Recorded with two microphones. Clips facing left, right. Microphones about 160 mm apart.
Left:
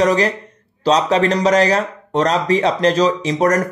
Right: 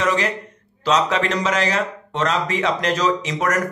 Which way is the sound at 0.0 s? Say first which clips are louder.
Left 6 dB; 40° left (ahead or behind).